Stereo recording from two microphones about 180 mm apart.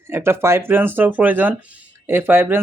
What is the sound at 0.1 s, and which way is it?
Speech, 15° right (ahead or behind).